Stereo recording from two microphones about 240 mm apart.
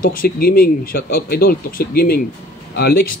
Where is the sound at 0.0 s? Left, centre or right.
Left.